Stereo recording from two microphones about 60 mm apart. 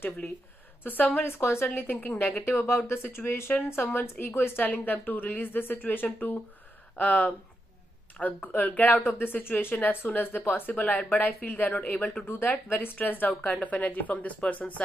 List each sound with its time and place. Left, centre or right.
0.8 s speech: left
1.2 s a woman's voice: left
12.3 s a woman's voice: left